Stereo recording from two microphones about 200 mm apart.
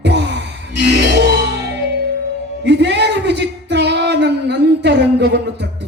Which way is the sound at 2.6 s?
60° right (ahead or behind).